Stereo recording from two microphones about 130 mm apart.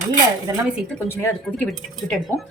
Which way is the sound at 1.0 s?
20° left (ahead or behind).